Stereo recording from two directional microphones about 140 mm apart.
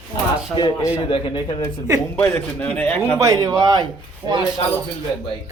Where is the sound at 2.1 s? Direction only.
10° left (ahead or behind).